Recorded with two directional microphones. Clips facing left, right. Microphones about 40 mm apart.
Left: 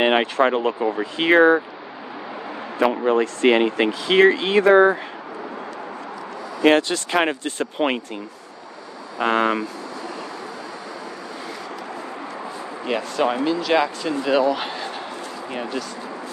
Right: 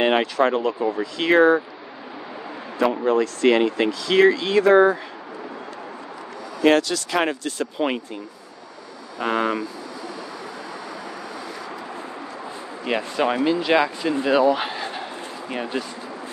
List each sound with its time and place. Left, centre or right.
0.0 s speech: left
2.8 s speech: left
6.6 s speech: left
9.2 s speech: left
12.8 s speech: centre
13.7 s speech: centre
14.2 s a sound: centre